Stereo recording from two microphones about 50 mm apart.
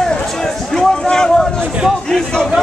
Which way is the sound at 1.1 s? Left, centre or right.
Centre.